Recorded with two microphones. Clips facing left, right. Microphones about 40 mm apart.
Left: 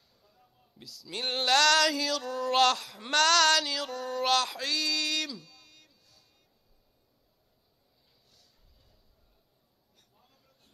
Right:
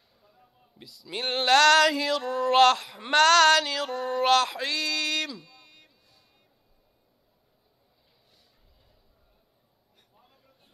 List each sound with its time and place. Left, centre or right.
0.2 s a sound: centre
1.4 s speech: centre
10.1 s vehicle: centre